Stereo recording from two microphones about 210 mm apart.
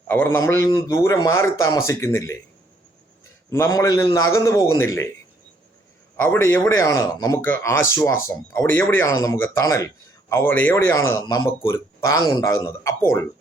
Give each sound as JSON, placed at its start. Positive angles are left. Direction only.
{"t": 0.1, "sound": "speech", "side_deg": 10}
{"t": 3.5, "sound": "speech", "side_deg": 15}
{"t": 6.1, "sound": "speech", "side_deg": 10}